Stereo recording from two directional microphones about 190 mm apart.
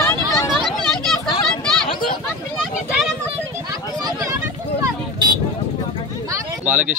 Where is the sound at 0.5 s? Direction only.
Centre (ahead or behind).